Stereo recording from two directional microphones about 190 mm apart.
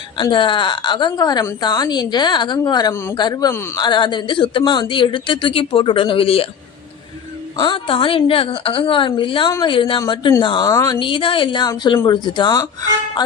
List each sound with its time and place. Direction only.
0.2 s a woman's voice: 25° left (ahead or behind)
7.5 s a woman's voice: 25° left (ahead or behind)